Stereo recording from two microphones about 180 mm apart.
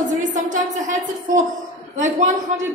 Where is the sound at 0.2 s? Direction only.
45° right (ahead or behind).